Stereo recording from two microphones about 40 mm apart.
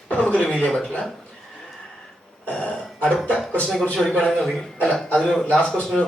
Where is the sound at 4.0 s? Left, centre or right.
Centre.